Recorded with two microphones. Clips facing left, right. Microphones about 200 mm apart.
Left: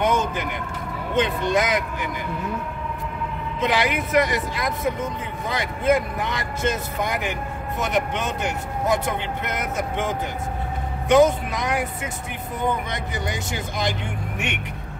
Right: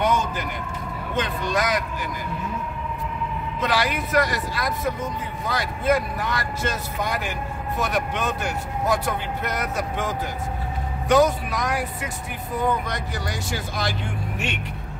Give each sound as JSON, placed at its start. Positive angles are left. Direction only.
{"t": 0.0, "sound": "vehicle", "side_deg": 20}
{"t": 1.1, "sound": "speech", "side_deg": 20}
{"t": 3.6, "sound": "speech", "side_deg": 20}